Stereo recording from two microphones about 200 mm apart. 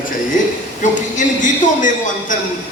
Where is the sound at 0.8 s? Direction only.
40° left (ahead or behind).